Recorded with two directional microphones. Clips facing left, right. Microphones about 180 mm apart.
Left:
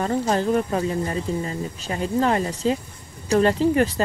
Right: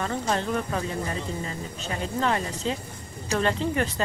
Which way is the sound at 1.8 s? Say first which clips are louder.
Left 5 dB; 35° left (ahead or behind).